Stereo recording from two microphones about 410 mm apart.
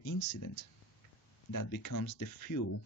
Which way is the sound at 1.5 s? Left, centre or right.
Left.